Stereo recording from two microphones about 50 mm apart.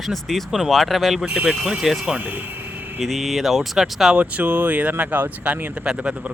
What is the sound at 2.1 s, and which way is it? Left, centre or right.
Speech, right.